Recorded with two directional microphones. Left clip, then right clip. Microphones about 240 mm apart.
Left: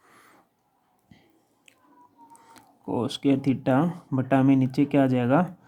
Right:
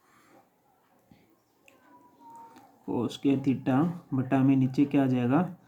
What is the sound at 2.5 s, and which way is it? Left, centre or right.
Speech, left.